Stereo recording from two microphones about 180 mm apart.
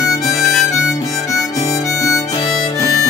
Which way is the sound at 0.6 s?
20° left (ahead or behind).